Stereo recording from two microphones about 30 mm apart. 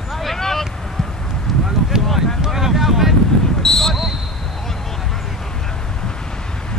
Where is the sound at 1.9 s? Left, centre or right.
Right.